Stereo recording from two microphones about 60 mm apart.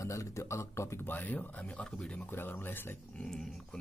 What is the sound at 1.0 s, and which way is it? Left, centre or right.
Speech, left.